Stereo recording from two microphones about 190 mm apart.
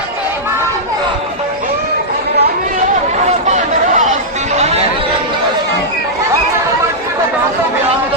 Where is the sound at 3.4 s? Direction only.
40° right (ahead or behind).